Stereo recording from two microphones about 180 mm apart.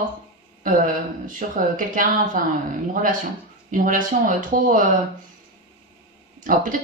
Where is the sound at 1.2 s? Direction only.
45° right (ahead or behind).